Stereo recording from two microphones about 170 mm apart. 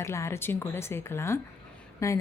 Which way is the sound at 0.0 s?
15° left (ahead or behind).